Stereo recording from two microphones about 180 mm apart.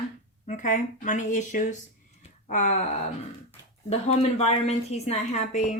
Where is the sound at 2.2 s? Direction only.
40° left (ahead or behind).